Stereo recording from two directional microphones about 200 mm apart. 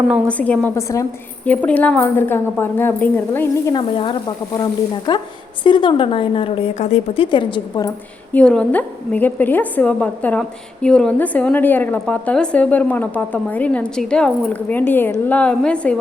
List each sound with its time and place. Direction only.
0.3 s a woman's voice: 5° left (ahead or behind)
3.8 s speech: 25° left (ahead or behind)
8.3 s a woman's voice: 5° left (ahead or behind)